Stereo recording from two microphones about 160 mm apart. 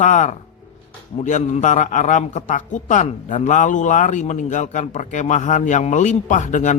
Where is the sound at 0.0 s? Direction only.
50° left (ahead or behind).